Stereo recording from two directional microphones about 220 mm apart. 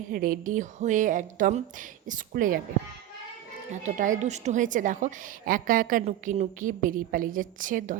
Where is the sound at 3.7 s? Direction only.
35° right (ahead or behind).